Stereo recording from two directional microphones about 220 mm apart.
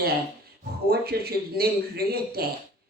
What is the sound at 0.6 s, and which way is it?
Speech, 45° right (ahead or behind).